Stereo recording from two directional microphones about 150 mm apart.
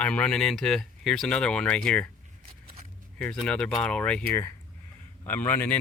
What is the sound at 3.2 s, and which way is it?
Speech, 5° left (ahead or behind).